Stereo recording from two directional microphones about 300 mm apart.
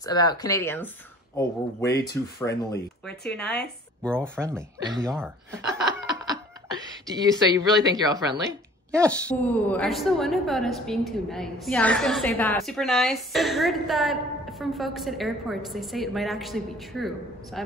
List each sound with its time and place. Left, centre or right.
0.0 s speech: centre
2.5 s speech: centre
6.2 s speech: centre
8.9 s speech: centre